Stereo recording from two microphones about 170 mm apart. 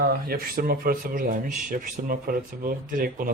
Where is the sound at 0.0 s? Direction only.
65° right (ahead or behind).